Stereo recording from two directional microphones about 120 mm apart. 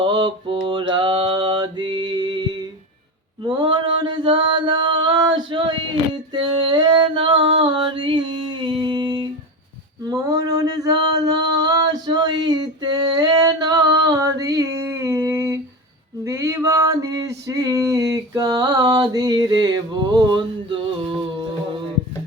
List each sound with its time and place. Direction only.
0.0 s mantra: 40° right (ahead or behind)
6.3 s a sound: 40° right (ahead or behind); by 15.6 s 25° right (ahead or behind)
16.2 s male singing: 20° right (ahead or behind); by 20.8 s 40° right (ahead or behind)